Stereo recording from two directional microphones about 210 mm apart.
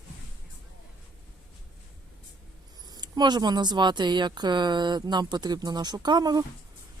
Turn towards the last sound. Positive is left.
turn(degrees=-20)  # may be behind; listen again after turning